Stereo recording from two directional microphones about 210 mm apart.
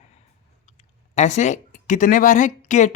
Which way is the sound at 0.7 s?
30° left (ahead or behind).